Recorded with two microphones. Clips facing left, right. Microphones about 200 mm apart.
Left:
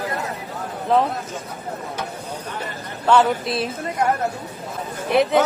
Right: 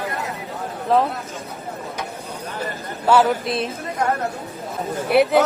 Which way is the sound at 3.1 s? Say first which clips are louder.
Right 1 dB; centre (ahead or behind).